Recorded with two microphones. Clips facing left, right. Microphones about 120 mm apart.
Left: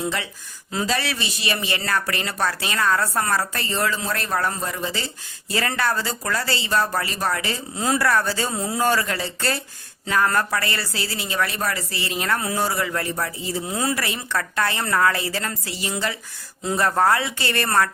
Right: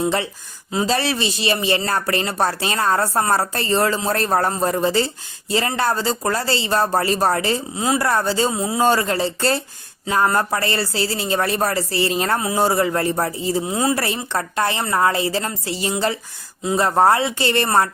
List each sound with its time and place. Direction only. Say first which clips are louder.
0.0 s speech: right 6 dB; 30° right (ahead or behind)
5.5 s speech: right 3 dB; 25° right (ahead or behind)
7.8 s speech: even; 15° right (ahead or behind)
8.0 s a woman's voice: right 3 dB; 25° right (ahead or behind)
8.9 s speech: right 4 dB; 30° right (ahead or behind)
12.4 s a woman's voice: right 6 dB; 20° right (ahead or behind)
13.9 s a woman's voice: right 4 dB; 35° right (ahead or behind)